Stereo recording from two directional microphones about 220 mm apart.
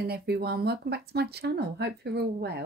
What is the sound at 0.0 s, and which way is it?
Speech, 45° right (ahead or behind).